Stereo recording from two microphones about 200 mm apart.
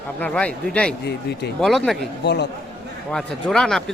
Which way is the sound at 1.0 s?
55° left (ahead or behind).